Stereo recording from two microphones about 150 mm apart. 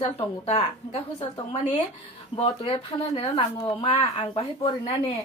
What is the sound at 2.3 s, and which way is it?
Speech, 35° left (ahead or behind).